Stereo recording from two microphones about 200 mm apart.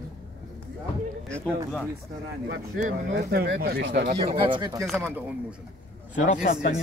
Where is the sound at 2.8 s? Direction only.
45° right (ahead or behind).